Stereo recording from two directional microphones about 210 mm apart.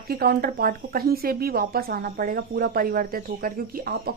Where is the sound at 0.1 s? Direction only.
45° right (ahead or behind).